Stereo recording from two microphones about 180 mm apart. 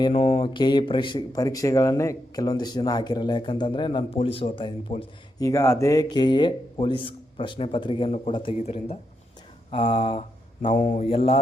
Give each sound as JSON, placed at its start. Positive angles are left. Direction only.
{"t": 0.0, "sound": "speech", "side_deg": 30}
{"t": 5.4, "sound": "speech", "side_deg": 15}
{"t": 10.7, "sound": "speech", "side_deg": 45}